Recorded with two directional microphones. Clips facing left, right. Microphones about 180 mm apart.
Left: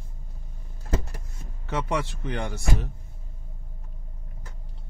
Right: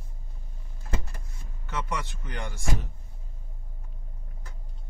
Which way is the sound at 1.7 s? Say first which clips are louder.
Left 6 dB; 65° left (ahead or behind).